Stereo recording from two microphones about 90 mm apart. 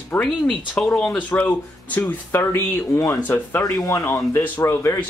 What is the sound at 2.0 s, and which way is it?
A man's voice, 20° left (ahead or behind).